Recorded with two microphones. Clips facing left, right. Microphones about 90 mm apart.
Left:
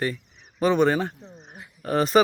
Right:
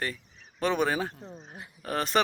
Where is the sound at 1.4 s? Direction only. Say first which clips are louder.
Even; 10° left (ahead or behind).